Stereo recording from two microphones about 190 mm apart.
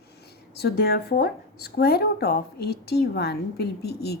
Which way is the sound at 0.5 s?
60° left (ahead or behind).